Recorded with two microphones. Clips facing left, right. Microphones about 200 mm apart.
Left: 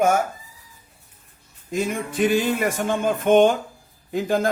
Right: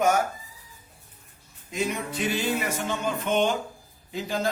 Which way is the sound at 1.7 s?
50° left (ahead or behind).